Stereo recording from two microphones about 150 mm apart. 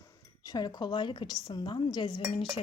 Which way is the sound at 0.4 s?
25° left (ahead or behind).